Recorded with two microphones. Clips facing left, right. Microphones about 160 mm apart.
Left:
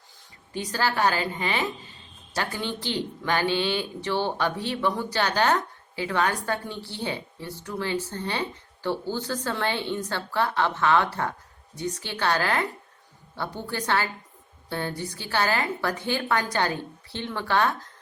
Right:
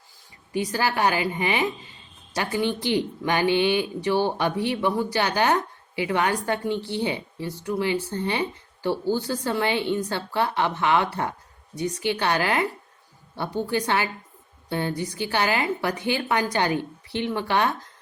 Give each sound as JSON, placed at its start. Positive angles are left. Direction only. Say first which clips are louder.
{"t": 0.5, "sound": "a woman's voice", "louder": "right 2 dB", "side_deg": -10}